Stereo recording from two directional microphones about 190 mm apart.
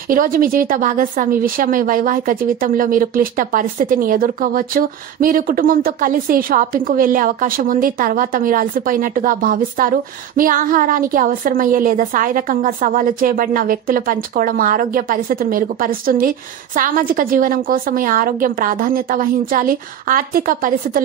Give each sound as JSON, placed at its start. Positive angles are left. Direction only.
{"t": 0.1, "sound": "a woman's voice", "side_deg": -45}